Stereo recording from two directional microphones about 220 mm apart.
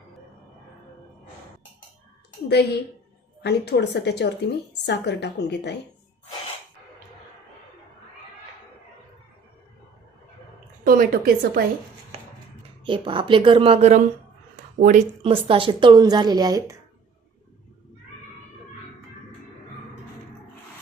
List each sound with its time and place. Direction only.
2.5 s a woman's voice: 50° left (ahead or behind)
10.8 s a woman's voice: 40° right (ahead or behind)
12.8 s a woman's voice: 20° right (ahead or behind)
14.5 s a sound: 40° right (ahead or behind)
15.2 s a woman's voice: 25° right (ahead or behind)